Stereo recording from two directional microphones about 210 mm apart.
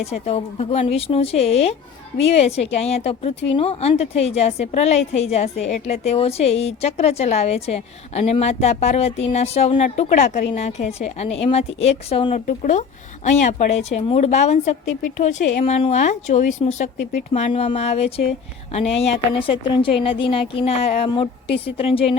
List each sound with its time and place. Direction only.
0.0 s a woman's voice: 30° left (ahead or behind)
19.4 s a woman's voice: 25° left (ahead or behind)